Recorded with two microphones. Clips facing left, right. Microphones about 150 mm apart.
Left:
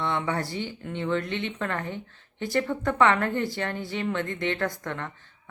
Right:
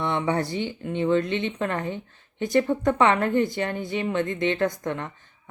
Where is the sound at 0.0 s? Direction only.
20° right (ahead or behind).